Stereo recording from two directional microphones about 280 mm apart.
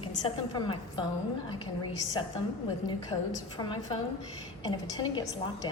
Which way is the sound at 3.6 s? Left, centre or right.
Centre.